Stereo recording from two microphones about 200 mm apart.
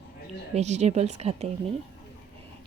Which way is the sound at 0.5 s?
35° right (ahead or behind).